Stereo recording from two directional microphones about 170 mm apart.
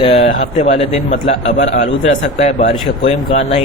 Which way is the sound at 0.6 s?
35° left (ahead or behind).